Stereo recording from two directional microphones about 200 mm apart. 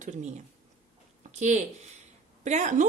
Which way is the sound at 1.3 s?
35° right (ahead or behind).